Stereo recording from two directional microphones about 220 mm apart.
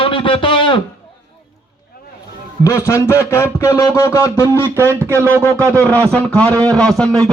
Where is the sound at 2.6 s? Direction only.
15° left (ahead or behind).